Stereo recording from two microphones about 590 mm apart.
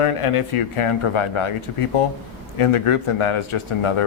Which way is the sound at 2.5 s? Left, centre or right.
Left.